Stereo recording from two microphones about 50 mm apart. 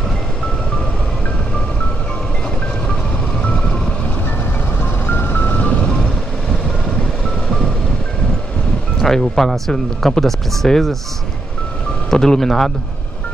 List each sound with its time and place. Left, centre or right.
5.0 s music: left
9.0 s speech: centre
12.1 s speech: centre